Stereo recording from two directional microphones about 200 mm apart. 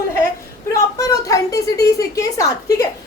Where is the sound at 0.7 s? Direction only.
15° left (ahead or behind).